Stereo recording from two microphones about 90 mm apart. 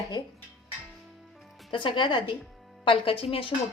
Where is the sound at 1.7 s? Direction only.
65° left (ahead or behind).